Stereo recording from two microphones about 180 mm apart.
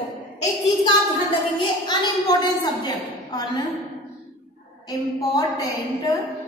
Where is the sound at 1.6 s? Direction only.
25° left (ahead or behind).